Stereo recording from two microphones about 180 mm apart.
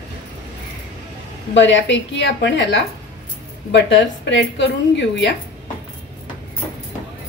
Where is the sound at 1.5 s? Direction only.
85° left.